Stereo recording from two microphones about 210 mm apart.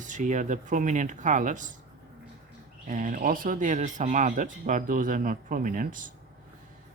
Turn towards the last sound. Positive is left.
turn(degrees=-40)  # may be behind; listen again after turning